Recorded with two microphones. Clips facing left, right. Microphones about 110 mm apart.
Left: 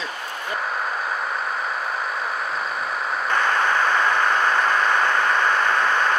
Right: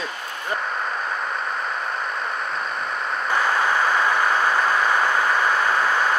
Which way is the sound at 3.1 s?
Centre (ahead or behind).